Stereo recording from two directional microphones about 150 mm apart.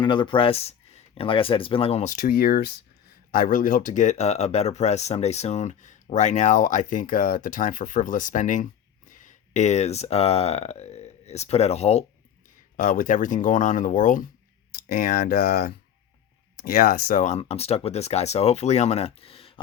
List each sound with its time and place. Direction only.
0.0 s speech: 30° left (ahead or behind)
2.1 s speech: 80° left
3.3 s speech: 65° left (ahead or behind); by 12.0 s 45° left (ahead or behind)
12.7 s speech: 60° left (ahead or behind)
14.8 s speech: 75° left (ahead or behind); by 17.4 s 55° left (ahead or behind)
17.4 s speech: 45° left (ahead or behind)